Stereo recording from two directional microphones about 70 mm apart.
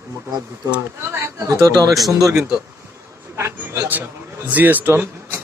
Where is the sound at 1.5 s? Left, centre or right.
Right.